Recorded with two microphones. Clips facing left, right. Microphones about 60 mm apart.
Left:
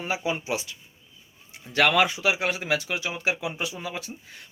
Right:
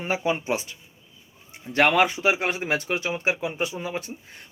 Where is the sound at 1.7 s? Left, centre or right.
Right.